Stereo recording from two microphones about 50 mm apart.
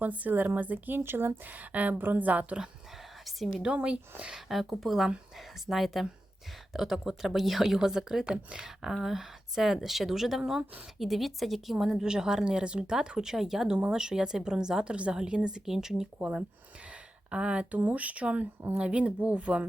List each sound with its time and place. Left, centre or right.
0.0 s speech: right
1.0 s speech: right
1.5 s speech: right
3.8 s speech: right
4.4 s a woman's voice: centre
17.3 s speech: right